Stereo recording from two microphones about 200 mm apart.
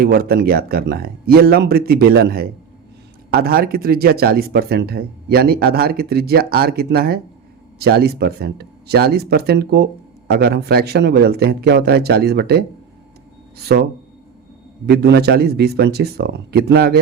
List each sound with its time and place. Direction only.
0.0 s speech: 50° right (ahead or behind)
14.8 s speech: 55° right (ahead or behind)